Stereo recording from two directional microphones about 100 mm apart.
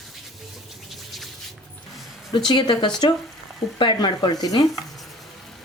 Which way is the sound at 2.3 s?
50° left (ahead or behind).